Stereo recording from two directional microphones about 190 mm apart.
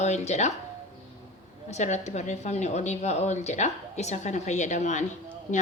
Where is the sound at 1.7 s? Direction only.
35° left (ahead or behind).